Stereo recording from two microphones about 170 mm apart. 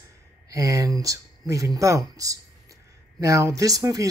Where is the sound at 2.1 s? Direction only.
20° right (ahead or behind).